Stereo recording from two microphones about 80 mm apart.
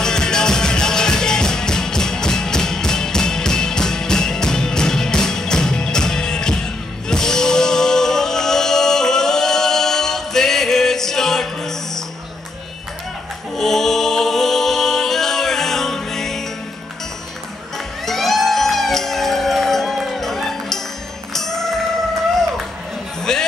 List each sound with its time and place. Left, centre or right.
0.0 s music: centre
13.6 s a capella: centre
18.0 s music: centre
23.3 s music: centre